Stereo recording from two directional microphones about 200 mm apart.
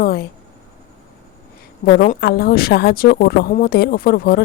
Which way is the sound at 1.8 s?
45° left (ahead or behind).